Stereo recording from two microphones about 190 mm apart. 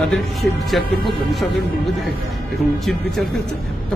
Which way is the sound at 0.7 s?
Centre (ahead or behind).